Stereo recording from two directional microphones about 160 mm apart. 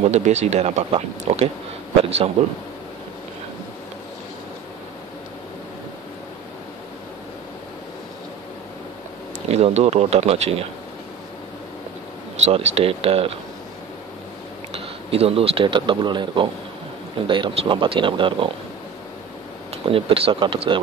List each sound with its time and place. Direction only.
0.1 s speech: 45° right (ahead or behind)
9.5 s speech: 40° right (ahead or behind)
12.4 s speech: 40° right (ahead or behind)
15.0 s speech: 35° right (ahead or behind)
19.9 s speech: 35° right (ahead or behind)